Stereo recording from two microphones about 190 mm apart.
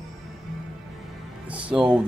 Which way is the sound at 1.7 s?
5° right (ahead or behind).